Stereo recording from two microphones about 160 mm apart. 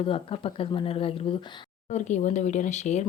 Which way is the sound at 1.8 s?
45° left (ahead or behind).